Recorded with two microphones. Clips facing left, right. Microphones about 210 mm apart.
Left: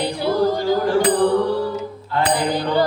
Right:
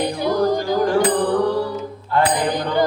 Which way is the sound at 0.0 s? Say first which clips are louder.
Even; 15° right (ahead or behind).